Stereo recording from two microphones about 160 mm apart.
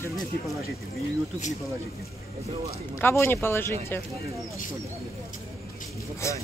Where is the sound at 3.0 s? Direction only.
15° left (ahead or behind).